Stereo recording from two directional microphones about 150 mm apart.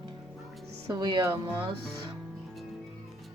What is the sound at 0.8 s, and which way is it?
Speech, 25° right (ahead or behind).